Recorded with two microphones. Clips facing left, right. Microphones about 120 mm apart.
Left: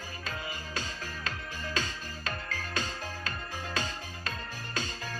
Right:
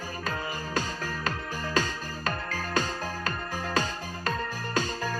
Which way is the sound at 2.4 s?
35° right (ahead or behind).